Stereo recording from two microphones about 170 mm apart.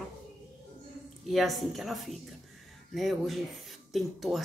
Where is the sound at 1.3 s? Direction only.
Centre (ahead or behind).